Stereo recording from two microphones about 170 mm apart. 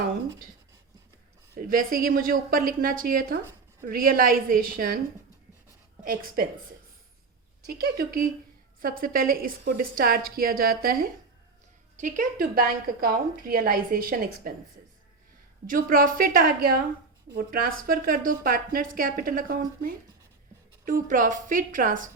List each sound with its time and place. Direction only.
1.6 s a woman's voice: 55° right (ahead or behind)
6.0 s a woman's voice: 60° right (ahead or behind)
7.8 s a woman's voice: 65° right (ahead or behind)
11.9 s a woman's voice: 50° right (ahead or behind)
15.7 s a woman's voice: 55° right (ahead or behind)